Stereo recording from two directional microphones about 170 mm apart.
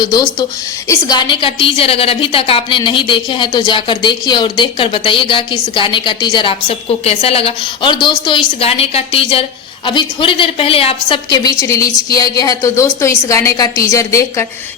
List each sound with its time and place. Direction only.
0.0 s a woman's voice: 25° left (ahead or behind)